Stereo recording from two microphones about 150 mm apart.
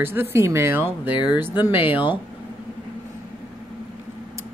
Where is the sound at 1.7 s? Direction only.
10° right (ahead or behind).